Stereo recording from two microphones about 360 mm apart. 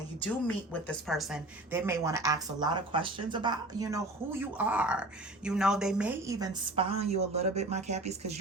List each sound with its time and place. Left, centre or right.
0.2 s a woman's voice: centre